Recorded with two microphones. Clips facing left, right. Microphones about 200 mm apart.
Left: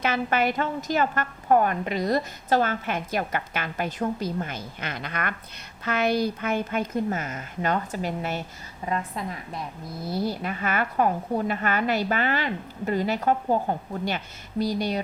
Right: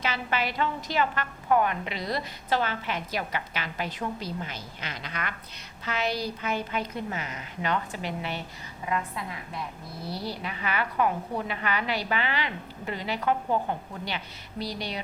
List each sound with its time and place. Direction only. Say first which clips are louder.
0.0 s a woman's voice: left 6 dB; 50° left (ahead or behind); by 9.0 s 35° left (ahead or behind)
10.1 s a woman's voice: left 7 dB; 45° left (ahead or behind)